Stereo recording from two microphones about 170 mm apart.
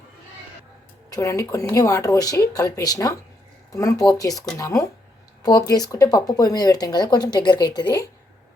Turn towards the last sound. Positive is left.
turn(degrees=25)  # may be behind; listen again after turning